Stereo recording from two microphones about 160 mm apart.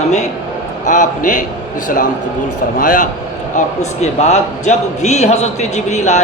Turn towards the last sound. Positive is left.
turn(degrees=45)  # may be behind; listen again after turning